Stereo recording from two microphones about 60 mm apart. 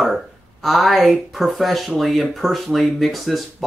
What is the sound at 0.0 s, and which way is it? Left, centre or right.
Speech, centre.